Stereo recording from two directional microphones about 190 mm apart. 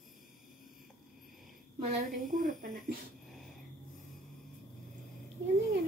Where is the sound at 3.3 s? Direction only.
Centre (ahead or behind).